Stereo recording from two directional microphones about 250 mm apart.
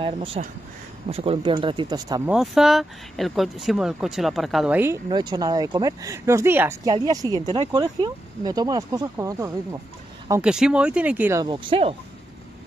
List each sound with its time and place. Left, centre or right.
0.0 s speech: right
2.3 s speech: centre